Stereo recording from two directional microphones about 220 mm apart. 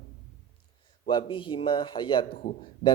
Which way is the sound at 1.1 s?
20° left (ahead or behind).